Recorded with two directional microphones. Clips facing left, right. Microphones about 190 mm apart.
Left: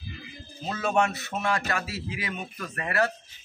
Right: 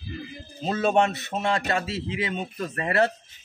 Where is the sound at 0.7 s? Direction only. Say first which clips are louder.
Right 4 dB; 25° right (ahead or behind).